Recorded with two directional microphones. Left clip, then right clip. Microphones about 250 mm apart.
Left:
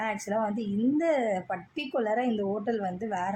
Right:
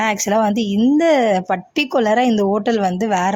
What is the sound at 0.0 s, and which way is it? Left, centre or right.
A woman's voice, right.